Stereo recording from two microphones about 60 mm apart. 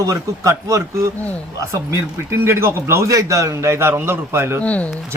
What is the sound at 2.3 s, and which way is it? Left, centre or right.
A man's voice, right.